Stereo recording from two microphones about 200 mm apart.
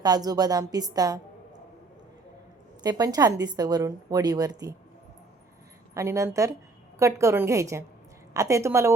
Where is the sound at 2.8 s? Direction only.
20° right (ahead or behind).